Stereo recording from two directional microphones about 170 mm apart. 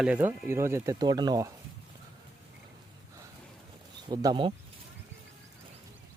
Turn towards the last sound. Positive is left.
turn(degrees=-25)  # may be behind; listen again after turning